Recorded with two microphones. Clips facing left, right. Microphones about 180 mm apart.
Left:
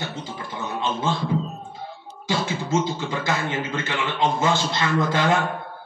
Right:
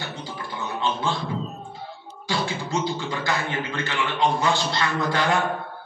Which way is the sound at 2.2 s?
20° left (ahead or behind).